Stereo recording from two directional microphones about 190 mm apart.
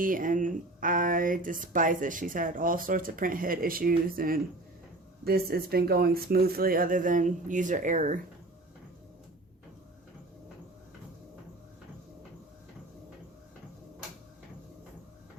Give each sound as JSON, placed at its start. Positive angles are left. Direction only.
{"t": 0.0, "sound": "speech", "side_deg": -45}